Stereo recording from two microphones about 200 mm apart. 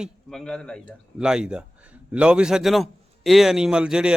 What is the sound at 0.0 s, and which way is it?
A man's voice, 5° left (ahead or behind).